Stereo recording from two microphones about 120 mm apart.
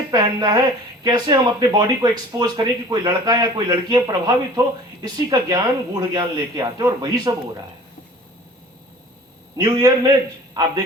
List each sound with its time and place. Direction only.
0.1 s speech: 35° right (ahead or behind)
9.6 s speech: 35° right (ahead or behind)